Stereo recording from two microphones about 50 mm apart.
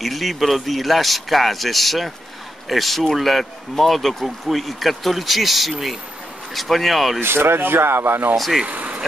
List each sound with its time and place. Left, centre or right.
0.0 s speech: centre
7.2 s speech: right
8.6 s speech: right